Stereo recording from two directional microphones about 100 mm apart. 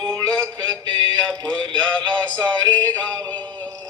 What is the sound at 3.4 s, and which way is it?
Music, 45° right (ahead or behind).